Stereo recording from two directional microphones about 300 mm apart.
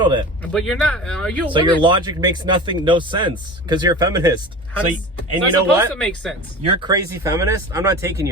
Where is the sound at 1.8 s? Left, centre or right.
Centre.